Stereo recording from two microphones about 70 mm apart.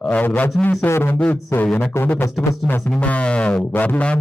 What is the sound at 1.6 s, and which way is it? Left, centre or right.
Music, left.